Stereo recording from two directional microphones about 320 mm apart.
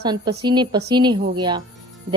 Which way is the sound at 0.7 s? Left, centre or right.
Right.